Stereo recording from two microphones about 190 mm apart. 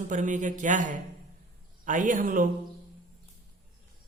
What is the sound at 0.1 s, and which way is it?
A man's voice, 40° right (ahead or behind).